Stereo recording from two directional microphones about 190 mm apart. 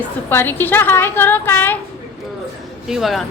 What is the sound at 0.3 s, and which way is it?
A woman's voice, 10° left (ahead or behind).